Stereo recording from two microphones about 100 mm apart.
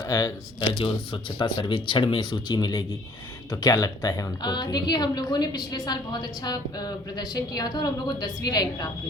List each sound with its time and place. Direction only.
0.0 s speech: 35° left (ahead or behind)
0.7 s a woman's voice: 55° left (ahead or behind); by 8.9 s 40° left (ahead or behind)